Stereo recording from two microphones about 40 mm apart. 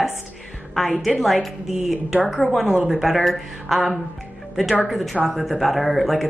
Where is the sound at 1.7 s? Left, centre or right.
Centre.